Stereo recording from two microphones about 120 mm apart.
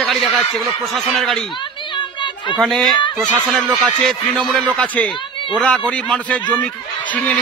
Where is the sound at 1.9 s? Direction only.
40° left (ahead or behind).